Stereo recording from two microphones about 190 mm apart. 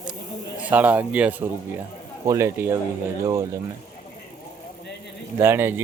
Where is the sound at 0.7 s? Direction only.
10° right (ahead or behind).